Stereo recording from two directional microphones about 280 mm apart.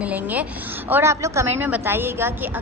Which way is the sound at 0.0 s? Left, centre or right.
Centre.